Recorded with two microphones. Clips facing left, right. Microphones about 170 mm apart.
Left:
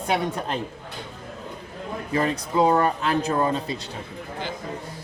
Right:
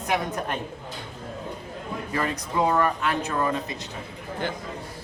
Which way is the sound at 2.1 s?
30° left (ahead or behind).